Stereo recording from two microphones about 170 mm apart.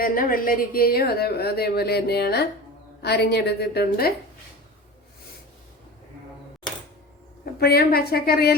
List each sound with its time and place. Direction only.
0.0 s speech: 55° left (ahead or behind)
7.6 s a woman's voice: 65° left (ahead or behind)